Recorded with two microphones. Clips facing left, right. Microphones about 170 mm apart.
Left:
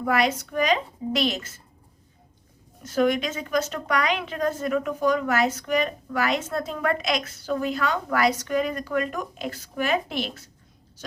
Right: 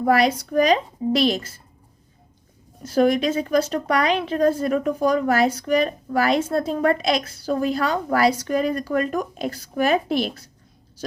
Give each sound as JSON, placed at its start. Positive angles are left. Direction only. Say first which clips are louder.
{"t": 0.0, "sound": "a woman's voice", "louder": "right 5 dB", "side_deg": -35}
{"t": 2.8, "sound": "a woman's voice", "louder": "right 4 dB", "side_deg": -35}